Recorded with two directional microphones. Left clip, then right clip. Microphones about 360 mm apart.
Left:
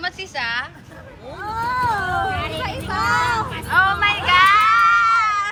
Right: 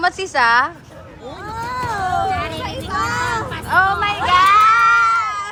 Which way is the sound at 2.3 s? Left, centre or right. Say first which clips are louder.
Right 3 dB; centre.